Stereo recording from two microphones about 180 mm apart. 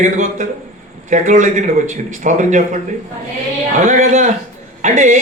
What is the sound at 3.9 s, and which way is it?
A man's voice, 45° right (ahead or behind).